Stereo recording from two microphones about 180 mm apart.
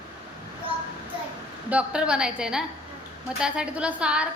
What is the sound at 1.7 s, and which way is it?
A woman's voice, 5° right (ahead or behind).